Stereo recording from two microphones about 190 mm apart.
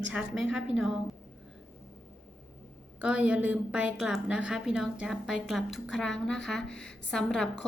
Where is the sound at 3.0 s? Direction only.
5° right (ahead or behind).